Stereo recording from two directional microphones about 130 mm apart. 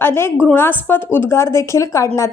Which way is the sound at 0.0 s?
20° left (ahead or behind).